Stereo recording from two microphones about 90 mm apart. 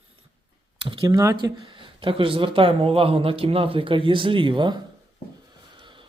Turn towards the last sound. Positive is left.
turn(degrees=-60)  # may be behind; listen again after turning